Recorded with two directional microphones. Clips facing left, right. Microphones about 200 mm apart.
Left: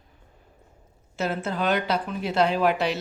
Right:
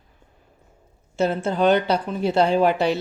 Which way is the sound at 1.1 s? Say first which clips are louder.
Right 6 dB; 30° right (ahead or behind).